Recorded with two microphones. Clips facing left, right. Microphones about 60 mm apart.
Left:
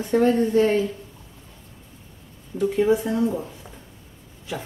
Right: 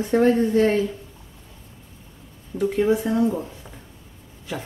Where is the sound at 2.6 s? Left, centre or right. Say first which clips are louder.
Even; centre.